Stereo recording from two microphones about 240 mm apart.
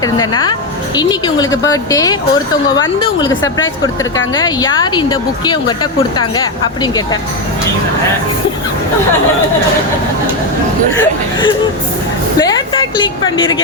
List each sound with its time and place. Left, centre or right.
0.9 s speech: centre
4.4 s speech: centre
10.9 s a woman's voice: centre